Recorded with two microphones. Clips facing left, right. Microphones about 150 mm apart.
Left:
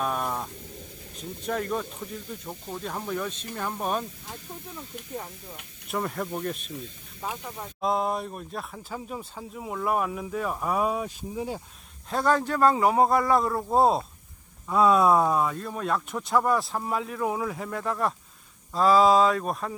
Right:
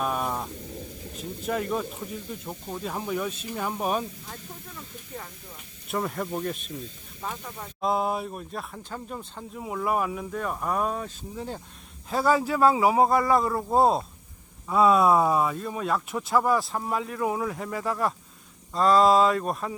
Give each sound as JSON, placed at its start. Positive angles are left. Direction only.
{"t": 0.0, "sound": "a sound", "side_deg": 0}
{"t": 1.1, "sound": "speech", "side_deg": -5}
{"t": 4.7, "sound": "speech", "side_deg": 20}
{"t": 5.9, "sound": "speech", "side_deg": 0}
{"t": 7.2, "sound": "speech", "side_deg": 10}
{"t": 7.9, "sound": "speech", "side_deg": 0}
{"t": 12.1, "sound": "speech", "side_deg": -5}